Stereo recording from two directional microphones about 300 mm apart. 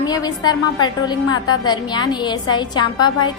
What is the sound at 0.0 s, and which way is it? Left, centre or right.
A woman's voice, centre.